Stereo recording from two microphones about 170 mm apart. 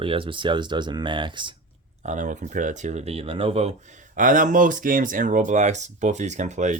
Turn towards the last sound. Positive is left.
turn(degrees=-45)  # may be behind; listen again after turning